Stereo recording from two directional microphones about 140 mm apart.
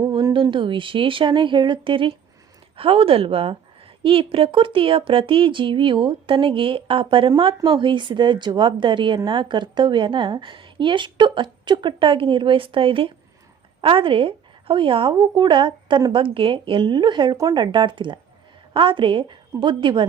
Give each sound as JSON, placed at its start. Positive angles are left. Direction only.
{"t": 0.3, "sound": "speech", "side_deg": -35}